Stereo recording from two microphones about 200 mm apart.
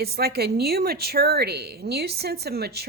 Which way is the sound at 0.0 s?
50° right (ahead or behind).